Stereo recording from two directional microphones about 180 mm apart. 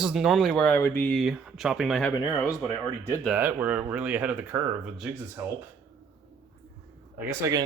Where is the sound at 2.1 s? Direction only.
20° left (ahead or behind).